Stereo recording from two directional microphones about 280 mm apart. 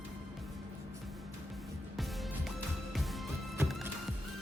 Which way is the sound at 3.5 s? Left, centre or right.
Centre.